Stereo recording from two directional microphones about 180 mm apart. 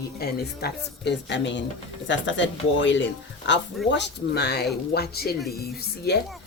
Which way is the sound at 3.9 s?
70° left (ahead or behind).